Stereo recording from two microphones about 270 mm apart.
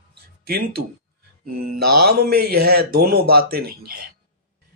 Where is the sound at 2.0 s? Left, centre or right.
Right.